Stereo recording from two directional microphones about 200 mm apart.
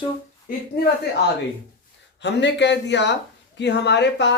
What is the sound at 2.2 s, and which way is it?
Speech, 60° left (ahead or behind).